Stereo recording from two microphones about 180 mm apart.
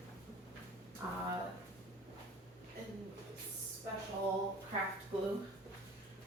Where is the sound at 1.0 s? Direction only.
20° right (ahead or behind).